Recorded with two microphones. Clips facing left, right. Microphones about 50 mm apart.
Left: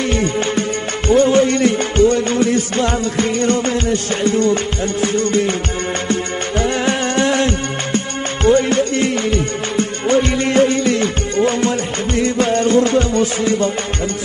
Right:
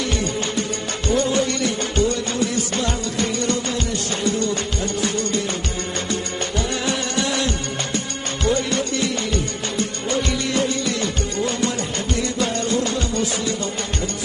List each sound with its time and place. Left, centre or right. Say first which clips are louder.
0.0 s music: left 6 dB; left
6.6 s music: left 8 dB; left